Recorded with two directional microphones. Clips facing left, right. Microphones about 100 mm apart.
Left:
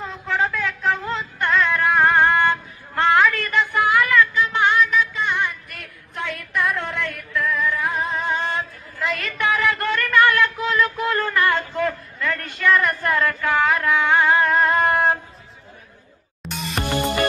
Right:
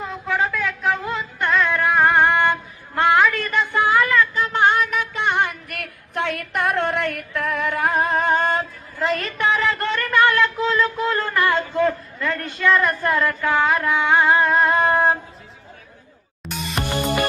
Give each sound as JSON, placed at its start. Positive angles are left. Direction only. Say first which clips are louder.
{"t": 0.0, "sound": "a sound", "louder": "right 1 dB", "side_deg": -5}
{"t": 0.9, "sound": "music", "louder": "even", "side_deg": -15}
{"t": 4.4, "sound": "female singing", "louder": "even", "side_deg": -40}
{"t": 16.4, "sound": "music", "louder": "even", "side_deg": 0}